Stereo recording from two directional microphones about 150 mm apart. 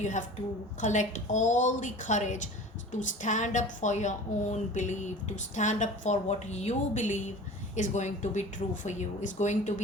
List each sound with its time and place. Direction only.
0.0 s a woman's voice: 55° left (ahead or behind)